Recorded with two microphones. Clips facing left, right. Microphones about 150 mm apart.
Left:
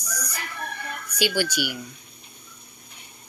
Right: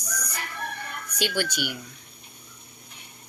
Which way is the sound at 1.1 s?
5° left (ahead or behind).